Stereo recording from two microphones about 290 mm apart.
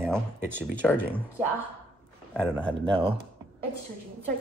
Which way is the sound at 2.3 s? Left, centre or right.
Centre.